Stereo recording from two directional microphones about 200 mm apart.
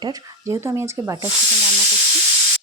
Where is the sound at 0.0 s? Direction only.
20° right (ahead or behind).